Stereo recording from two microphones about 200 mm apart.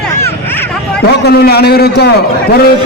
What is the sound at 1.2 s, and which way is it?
Speech, 55° left (ahead or behind).